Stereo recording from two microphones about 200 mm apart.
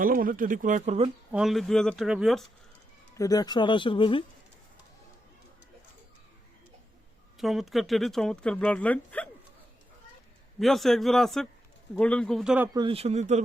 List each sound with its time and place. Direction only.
0.0 s speech: 45° right (ahead or behind)
1.3 s speech: centre (ahead or behind)
3.2 s speech: 20° left (ahead or behind)
7.3 s speech: centre (ahead or behind)
10.6 s speech: centre (ahead or behind)
12.7 s speech: 25° right (ahead or behind)